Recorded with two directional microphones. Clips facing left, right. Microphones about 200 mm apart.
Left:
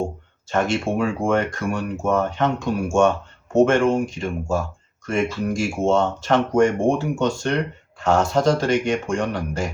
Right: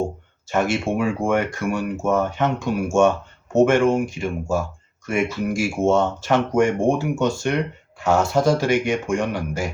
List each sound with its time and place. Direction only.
0.5 s speech: 5° right (ahead or behind)